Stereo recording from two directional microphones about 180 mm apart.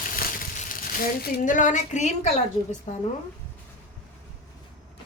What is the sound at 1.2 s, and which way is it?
A woman's voice, 50° left (ahead or behind).